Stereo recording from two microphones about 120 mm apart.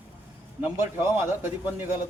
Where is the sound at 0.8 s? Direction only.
20° right (ahead or behind).